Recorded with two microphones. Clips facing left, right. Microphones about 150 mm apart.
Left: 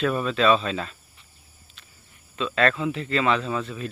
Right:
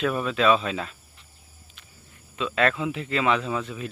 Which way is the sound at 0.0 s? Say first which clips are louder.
Left 1 dB; 10° right (ahead or behind).